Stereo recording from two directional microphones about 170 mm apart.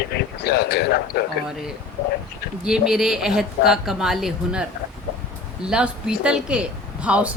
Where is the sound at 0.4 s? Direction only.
70° left (ahead or behind).